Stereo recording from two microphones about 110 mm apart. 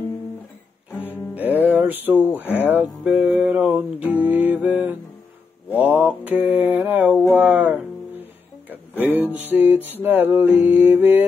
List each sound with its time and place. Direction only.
1.3 s music: 15° right (ahead or behind)
7.3 s guitar: 10° right (ahead or behind)
9.0 s music: 15° right (ahead or behind)